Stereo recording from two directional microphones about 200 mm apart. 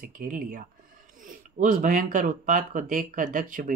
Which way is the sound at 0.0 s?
45° right (ahead or behind).